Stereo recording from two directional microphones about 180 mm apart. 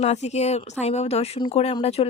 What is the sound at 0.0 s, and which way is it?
Speech, 35° left (ahead or behind).